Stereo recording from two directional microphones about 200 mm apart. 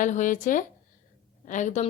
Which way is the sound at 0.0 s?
40° left (ahead or behind).